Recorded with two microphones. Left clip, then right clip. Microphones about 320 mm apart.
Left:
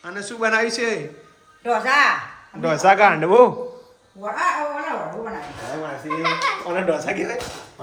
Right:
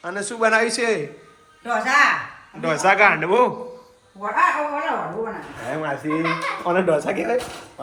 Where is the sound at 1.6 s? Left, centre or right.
Left.